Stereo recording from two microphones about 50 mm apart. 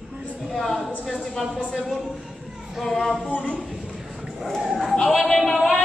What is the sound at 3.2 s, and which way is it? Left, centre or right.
Speech, left.